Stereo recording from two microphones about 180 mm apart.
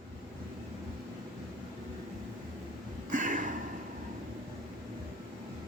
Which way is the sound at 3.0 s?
45° right (ahead or behind).